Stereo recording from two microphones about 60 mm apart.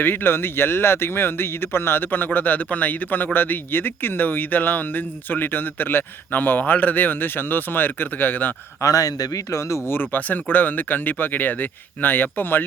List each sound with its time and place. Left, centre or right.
0.0 s speech: left
8.8 s a man's voice: left
9.9 s speech: left